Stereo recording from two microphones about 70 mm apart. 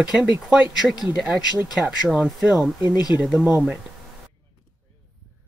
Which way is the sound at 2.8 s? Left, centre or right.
Left.